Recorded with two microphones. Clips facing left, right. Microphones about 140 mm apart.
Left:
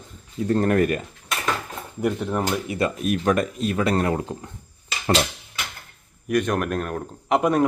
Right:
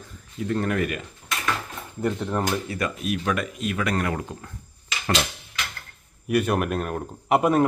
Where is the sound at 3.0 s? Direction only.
45° left (ahead or behind); by 4.5 s 25° left (ahead or behind).